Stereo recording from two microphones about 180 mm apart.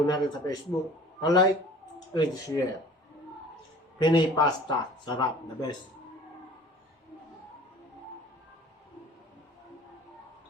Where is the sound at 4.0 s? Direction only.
25° left (ahead or behind).